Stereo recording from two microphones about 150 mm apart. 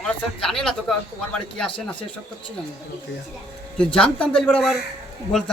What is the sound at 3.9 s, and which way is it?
Speech, 5° left (ahead or behind).